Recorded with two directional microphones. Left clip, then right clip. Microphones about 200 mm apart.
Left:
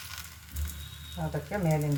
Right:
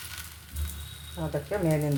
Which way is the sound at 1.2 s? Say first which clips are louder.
Right 2 dB; 35° right (ahead or behind).